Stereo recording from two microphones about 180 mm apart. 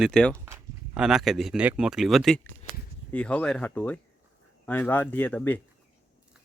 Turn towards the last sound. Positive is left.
turn(degrees=10)  # may be behind; listen again after turning